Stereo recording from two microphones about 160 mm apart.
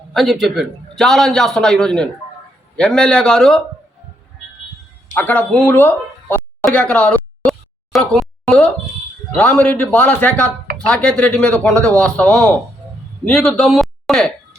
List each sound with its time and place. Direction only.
0.1 s a man's voice: centre (ahead or behind)
5.1 s speech: 10° left (ahead or behind)
7.9 s a sound: centre (ahead or behind)
9.3 s a man's voice: 5° left (ahead or behind)